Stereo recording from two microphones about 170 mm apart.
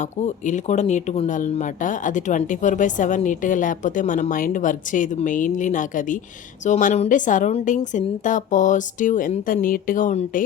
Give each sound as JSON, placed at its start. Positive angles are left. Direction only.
{"t": 0.0, "sound": "a woman's voice", "side_deg": 45}